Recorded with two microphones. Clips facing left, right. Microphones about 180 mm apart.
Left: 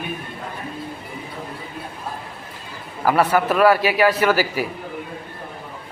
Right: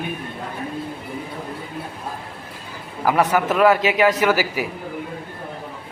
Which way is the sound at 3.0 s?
15° right (ahead or behind).